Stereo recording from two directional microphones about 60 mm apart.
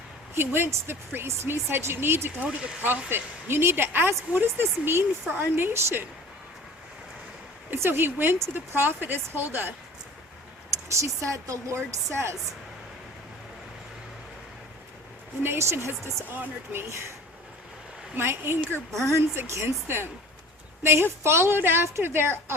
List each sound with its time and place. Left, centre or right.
0.3 s speech: right
2.4 s speech: right
3.1 s speech: right
7.7 s speech: right
10.8 s speech: right
15.4 s speech: right
16.3 s speech: right
18.2 s speech: right
18.9 s speech: right
19.4 s speech: right